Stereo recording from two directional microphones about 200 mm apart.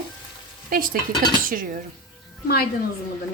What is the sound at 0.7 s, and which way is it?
Stir, 45° right (ahead or behind).